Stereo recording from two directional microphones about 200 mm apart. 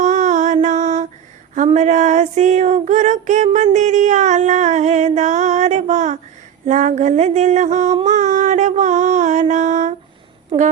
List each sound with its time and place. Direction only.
0.0 s music: 35° right (ahead or behind)
1.5 s female singing: 35° right (ahead or behind)
8.0 s mantra: 40° right (ahead or behind)